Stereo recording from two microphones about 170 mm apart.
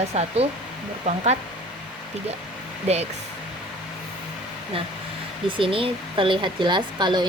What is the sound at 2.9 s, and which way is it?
Speech, 40° right (ahead or behind).